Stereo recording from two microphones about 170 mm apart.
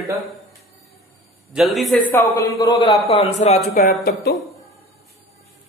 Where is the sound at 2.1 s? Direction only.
20° left (ahead or behind).